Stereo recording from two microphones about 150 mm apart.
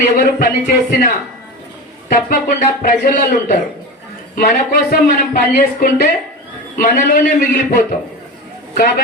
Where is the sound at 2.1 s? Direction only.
65° left (ahead or behind).